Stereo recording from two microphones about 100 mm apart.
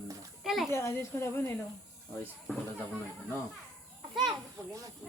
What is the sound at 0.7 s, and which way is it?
Speech, 25° left (ahead or behind).